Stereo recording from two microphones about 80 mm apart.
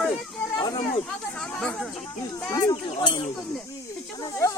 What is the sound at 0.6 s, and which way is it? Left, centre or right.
Speech, left.